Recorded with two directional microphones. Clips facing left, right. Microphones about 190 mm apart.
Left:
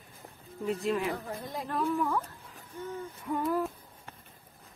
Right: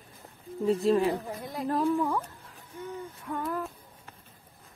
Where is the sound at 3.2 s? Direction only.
5° left (ahead or behind).